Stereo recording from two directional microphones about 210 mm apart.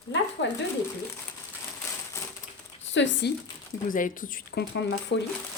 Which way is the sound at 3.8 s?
40° left (ahead or behind).